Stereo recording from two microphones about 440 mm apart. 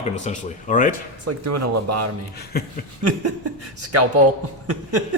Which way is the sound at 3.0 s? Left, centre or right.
Right.